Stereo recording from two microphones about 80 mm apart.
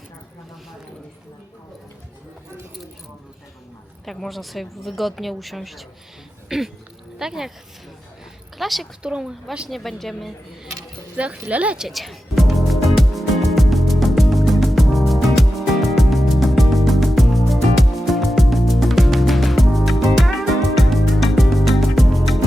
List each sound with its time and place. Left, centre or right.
4.0 s a woman's voice: centre
8.5 s a woman's voice: centre
9.6 s a woman's voice: centre
11.2 s speech: centre
11.9 s music: centre